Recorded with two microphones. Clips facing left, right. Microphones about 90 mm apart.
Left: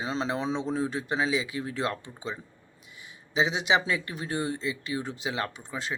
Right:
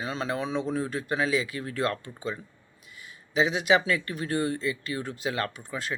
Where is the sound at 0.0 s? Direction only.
25° left (ahead or behind).